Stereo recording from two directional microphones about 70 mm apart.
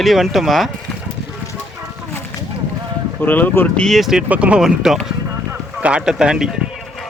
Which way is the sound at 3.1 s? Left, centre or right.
Left.